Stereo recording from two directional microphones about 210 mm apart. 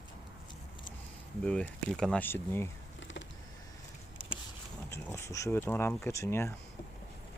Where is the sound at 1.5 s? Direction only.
5° left (ahead or behind).